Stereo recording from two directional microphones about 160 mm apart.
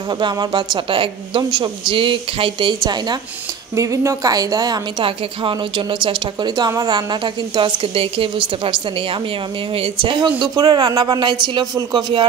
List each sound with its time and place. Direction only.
0.2 s a woman's voice: 30° right (ahead or behind)
9.8 s a woman's voice: 30° right (ahead or behind)